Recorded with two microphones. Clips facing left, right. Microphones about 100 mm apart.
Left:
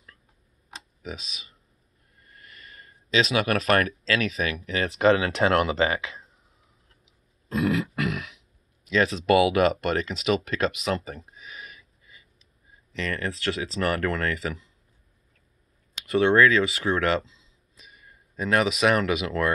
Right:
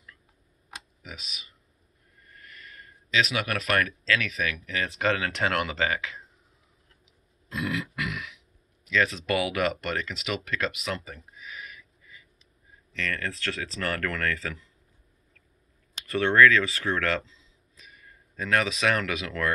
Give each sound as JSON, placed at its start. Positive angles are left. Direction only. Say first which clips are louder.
{"t": 1.0, "sound": "speech", "louder": "left 10 dB", "side_deg": 25}
{"t": 3.1, "sound": "speech", "louder": "left 4 dB", "side_deg": 25}
{"t": 4.6, "sound": "speech", "louder": "left 8 dB", "side_deg": 25}
{"t": 7.5, "sound": "grunt", "louder": "left 6 dB", "side_deg": 35}
{"t": 8.0, "sound": "throat clearing", "louder": "left 5 dB", "side_deg": 35}
{"t": 8.8, "sound": "speech", "louder": "left 4 dB", "side_deg": 25}
{"t": 12.9, "sound": "speech", "louder": "left 2 dB", "side_deg": 25}
{"t": 16.1, "sound": "speech", "louder": "left 1 dB", "side_deg": 20}